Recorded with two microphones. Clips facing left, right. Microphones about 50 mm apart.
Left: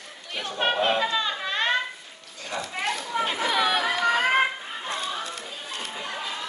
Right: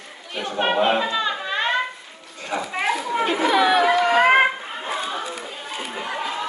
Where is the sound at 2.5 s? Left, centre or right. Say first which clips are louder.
Right 6 dB; centre.